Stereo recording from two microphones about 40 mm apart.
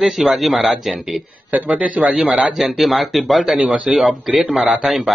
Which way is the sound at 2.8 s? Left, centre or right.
Centre.